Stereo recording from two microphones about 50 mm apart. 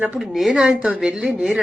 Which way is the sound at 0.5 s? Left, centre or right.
Right.